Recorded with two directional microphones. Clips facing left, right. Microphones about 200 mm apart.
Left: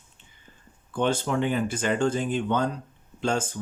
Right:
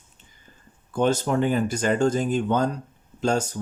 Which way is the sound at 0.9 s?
40° right (ahead or behind).